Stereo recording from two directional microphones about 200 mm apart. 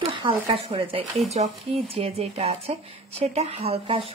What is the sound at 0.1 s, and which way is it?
Speech, 25° right (ahead or behind).